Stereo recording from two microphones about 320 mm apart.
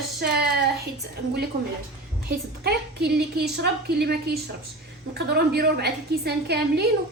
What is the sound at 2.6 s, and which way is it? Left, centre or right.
A woman's voice, right.